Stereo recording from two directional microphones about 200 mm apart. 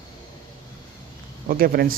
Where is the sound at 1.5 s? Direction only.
45° right (ahead or behind).